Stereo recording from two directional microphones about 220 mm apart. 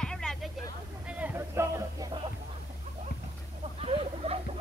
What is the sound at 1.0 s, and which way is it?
Music, 10° right (ahead or behind).